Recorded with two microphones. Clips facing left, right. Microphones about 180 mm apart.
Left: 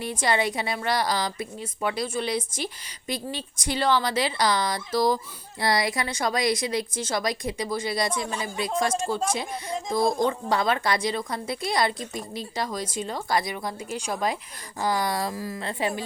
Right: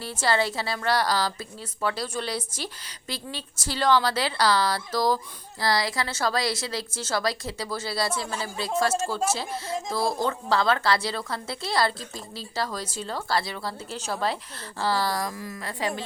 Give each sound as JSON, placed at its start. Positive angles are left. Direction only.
{"t": 0.0, "sound": "speech", "side_deg": 15}
{"t": 3.7, "sound": "speech", "side_deg": 10}